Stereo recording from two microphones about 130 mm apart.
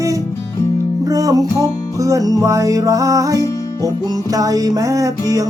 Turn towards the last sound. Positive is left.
turn(degrees=-25)  # may be behind; listen again after turning